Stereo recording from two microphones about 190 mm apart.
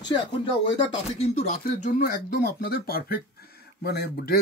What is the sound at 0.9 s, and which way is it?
Speech, 35° left (ahead or behind).